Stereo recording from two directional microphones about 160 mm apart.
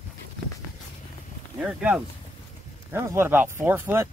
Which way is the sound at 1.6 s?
5° right (ahead or behind).